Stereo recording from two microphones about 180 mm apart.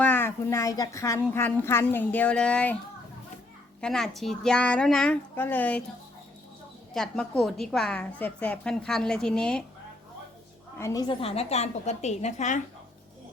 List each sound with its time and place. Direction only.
0.0 s a child's voice: 10° left (ahead or behind)
3.8 s a woman's voice: 5° left (ahead or behind)
6.9 s a woman's voice: centre (ahead or behind)
10.8 s a woman's voice: 20° left (ahead or behind); by 12.6 s 40° left (ahead or behind)